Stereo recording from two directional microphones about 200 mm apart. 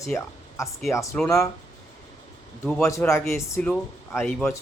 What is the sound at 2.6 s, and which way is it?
Speech, 10° left (ahead or behind).